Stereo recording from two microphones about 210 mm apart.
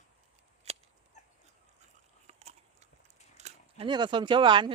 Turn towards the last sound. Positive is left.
turn(degrees=-20)  # may be behind; listen again after turning